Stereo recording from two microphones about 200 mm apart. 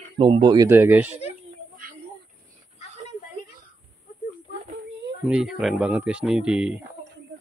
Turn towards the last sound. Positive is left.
turn(degrees=-5)  # may be behind; listen again after turning